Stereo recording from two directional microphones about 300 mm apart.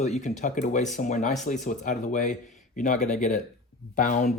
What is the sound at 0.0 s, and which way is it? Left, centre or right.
Speech, left.